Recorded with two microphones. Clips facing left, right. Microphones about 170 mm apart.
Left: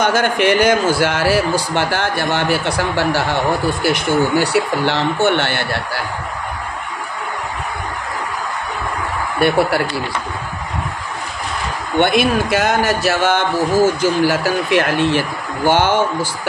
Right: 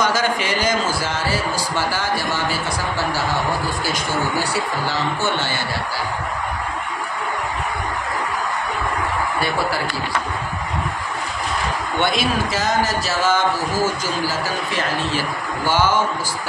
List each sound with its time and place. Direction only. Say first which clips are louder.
0.0 s a man's voice: left 5 dB; 60° left (ahead or behind)
9.4 s a man's voice: left 11 dB; 65° left (ahead or behind)
12.0 s a man's voice: left 7 dB; 55° left (ahead or behind)